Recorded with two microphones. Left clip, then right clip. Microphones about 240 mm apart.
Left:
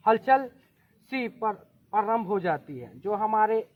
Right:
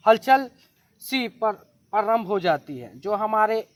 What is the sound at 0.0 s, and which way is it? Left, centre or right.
Speech, right.